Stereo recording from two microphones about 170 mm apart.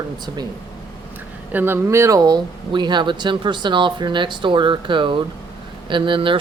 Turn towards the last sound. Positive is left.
turn(degrees=-30)  # may be behind; listen again after turning